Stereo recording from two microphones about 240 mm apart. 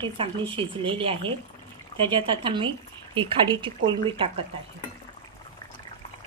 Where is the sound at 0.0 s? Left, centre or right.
Right.